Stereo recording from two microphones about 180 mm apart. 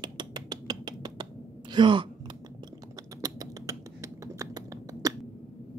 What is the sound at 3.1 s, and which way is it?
Finger snapping, 20° right (ahead or behind).